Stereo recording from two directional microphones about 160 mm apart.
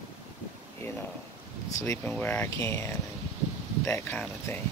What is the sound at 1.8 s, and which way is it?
Speech, 15° left (ahead or behind).